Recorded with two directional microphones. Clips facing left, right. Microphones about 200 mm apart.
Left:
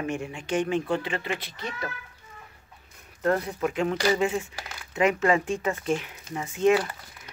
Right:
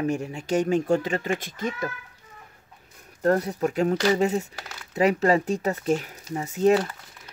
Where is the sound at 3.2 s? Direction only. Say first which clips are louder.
Right 3 dB; 40° right (ahead or behind).